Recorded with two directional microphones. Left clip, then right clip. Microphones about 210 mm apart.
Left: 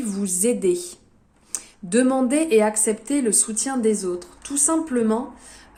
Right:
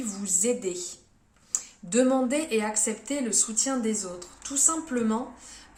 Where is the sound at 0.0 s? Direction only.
45° left (ahead or behind).